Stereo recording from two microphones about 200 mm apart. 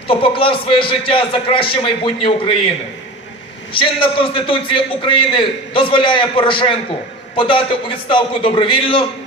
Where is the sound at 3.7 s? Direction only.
25° left (ahead or behind).